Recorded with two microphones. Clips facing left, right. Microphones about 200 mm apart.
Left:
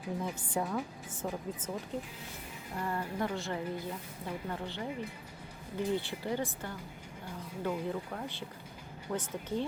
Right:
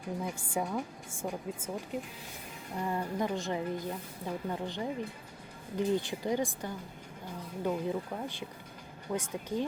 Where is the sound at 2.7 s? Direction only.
15° right (ahead or behind).